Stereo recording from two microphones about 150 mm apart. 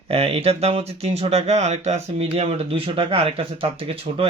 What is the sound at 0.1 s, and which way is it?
Speech, 40° right (ahead or behind).